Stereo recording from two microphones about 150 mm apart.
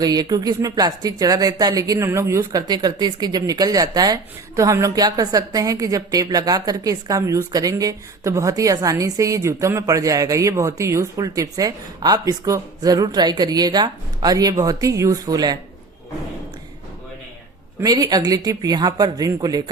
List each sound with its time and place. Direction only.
0.0 s speech: 25° right (ahead or behind)
17.7 s speech: 25° right (ahead or behind)